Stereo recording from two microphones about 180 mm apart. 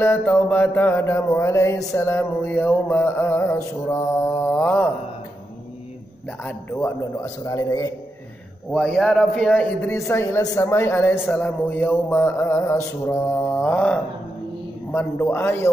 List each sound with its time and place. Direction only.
0.0 s a man's voice: 10° left (ahead or behind)
7.4 s a man's voice: 20° left (ahead or behind)
8.7 s a man's voice: 5° left (ahead or behind)